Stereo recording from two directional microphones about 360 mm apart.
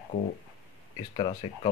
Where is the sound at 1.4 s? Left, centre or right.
Centre.